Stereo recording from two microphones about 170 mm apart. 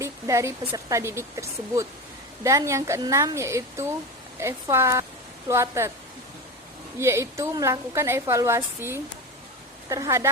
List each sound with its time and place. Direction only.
0.0 s a woman's voice: 15° right (ahead or behind)
7.0 s a woman's voice: 15° right (ahead or behind)